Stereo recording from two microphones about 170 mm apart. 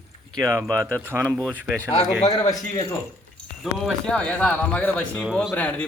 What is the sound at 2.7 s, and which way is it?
Speech, 20° left (ahead or behind).